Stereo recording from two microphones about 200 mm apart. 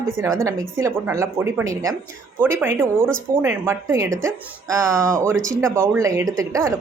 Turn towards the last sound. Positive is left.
turn(degrees=-15)  # may be behind; listen again after turning